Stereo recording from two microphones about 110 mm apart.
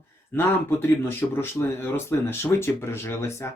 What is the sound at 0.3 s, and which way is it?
Speech, 20° left (ahead or behind).